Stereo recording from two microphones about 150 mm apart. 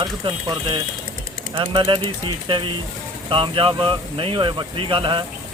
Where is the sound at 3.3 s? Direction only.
35° right (ahead or behind).